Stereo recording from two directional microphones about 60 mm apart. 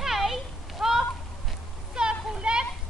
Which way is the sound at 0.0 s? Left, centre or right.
Centre.